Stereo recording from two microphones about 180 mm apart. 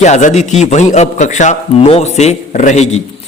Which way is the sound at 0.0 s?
40° left (ahead or behind).